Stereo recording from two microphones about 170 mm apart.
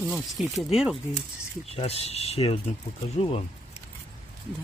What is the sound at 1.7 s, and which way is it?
Speech, 35° left (ahead or behind).